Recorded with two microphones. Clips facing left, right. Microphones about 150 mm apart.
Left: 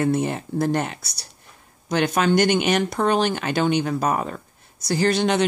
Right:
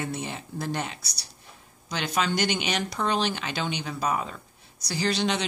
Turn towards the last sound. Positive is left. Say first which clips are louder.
# left 7 dB
turn(degrees=50)  # may be behind; listen again after turning